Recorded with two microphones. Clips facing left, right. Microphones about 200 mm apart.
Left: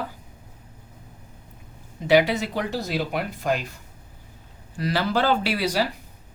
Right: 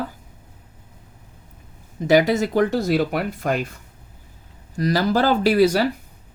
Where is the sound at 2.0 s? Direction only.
45° right (ahead or behind).